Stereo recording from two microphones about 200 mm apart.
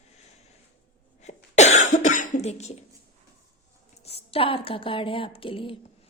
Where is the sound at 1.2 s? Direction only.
35° left (ahead or behind).